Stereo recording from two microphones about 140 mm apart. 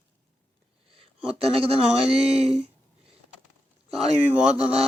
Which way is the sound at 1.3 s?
45° right (ahead or behind).